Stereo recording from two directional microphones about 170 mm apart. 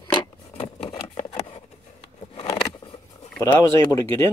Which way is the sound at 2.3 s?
35° left (ahead or behind).